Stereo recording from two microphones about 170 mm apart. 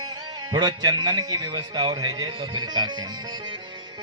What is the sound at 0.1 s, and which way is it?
A man's voice, 25° right (ahead or behind).